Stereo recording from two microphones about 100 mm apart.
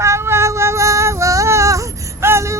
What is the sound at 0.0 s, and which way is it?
Child singing, 25° right (ahead or behind).